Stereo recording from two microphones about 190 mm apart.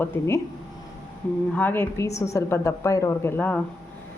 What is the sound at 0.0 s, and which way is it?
Speech, 15° left (ahead or behind).